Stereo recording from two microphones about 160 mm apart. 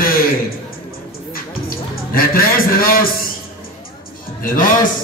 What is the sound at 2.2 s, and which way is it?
Speech, 65° left (ahead or behind).